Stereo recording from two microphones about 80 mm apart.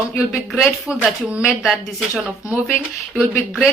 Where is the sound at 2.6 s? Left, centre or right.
Left.